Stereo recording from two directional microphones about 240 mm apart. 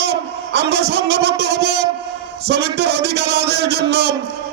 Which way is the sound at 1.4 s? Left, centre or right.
Right.